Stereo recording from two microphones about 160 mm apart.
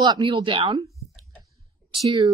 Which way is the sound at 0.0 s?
30° right (ahead or behind).